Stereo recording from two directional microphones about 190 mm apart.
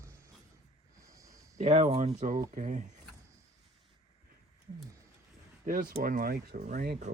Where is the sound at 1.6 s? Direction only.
40° right (ahead or behind).